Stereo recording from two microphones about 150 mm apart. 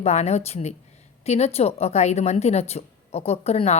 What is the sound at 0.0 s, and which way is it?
A woman's voice, 45° left (ahead or behind).